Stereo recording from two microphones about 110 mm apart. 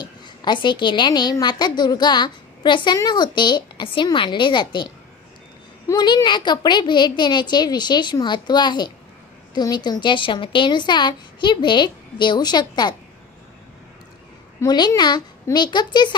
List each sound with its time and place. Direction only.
0.4 s a woman's voice: 45° left (ahead or behind)
5.9 s a woman's voice: 40° left (ahead or behind)
14.6 s a woman's voice: 35° left (ahead or behind)